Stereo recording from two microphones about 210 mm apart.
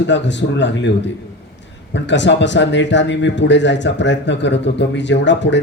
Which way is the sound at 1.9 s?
60° left (ahead or behind).